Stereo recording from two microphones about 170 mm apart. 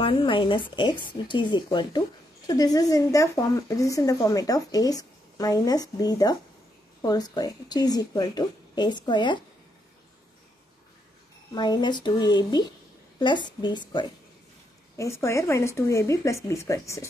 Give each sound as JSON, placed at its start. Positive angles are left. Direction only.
{"t": 0.0, "sound": "speech", "side_deg": 30}
{"t": 11.5, "sound": "speech", "side_deg": 25}
{"t": 15.0, "sound": "speech", "side_deg": 15}